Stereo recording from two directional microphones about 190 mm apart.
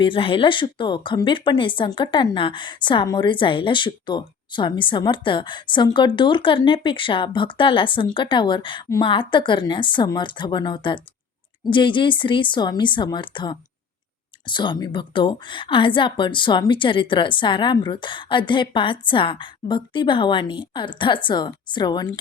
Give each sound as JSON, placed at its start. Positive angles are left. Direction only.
{"t": 0.0, "sound": "speech", "side_deg": 30}